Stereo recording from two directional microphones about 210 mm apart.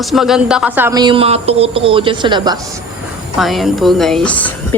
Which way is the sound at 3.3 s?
Centre (ahead or behind).